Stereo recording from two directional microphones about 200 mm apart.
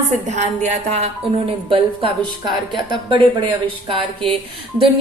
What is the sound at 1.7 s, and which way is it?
Speech, 25° right (ahead or behind).